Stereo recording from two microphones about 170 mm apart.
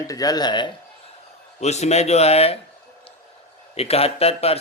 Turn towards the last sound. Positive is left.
turn(degrees=35)  # may be behind; listen again after turning